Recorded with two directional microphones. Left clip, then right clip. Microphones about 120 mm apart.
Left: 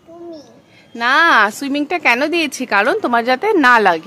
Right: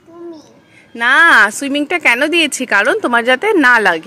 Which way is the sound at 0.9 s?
20° left (ahead or behind).